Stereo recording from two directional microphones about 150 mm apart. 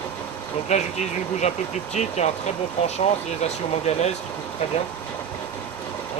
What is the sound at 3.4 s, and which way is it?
Speech, 45° left (ahead or behind).